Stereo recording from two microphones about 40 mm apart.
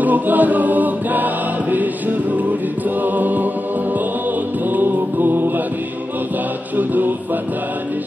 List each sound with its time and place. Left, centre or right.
0.0 s choir: right
3.0 s music: right
4.7 s music: right